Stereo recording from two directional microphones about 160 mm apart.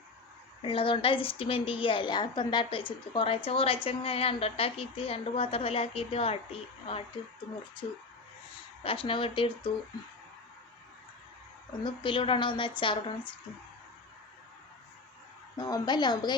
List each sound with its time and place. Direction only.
0.6 s a woman's voice: 35° left (ahead or behind)
8.8 s a woman's voice: 35° left (ahead or behind)
11.8 s a woman's voice: 30° left (ahead or behind)
15.5 s a woman's voice: 25° left (ahead or behind)